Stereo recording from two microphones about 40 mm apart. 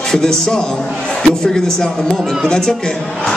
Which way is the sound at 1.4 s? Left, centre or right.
Centre.